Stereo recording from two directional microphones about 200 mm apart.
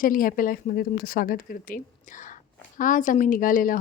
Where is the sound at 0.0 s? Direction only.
45° left (ahead or behind).